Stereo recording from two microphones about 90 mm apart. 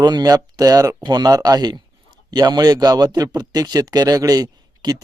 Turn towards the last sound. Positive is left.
turn(degrees=-50)  # may be behind; listen again after turning